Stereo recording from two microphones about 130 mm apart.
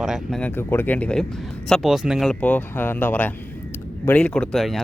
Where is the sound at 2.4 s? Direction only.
10° left (ahead or behind).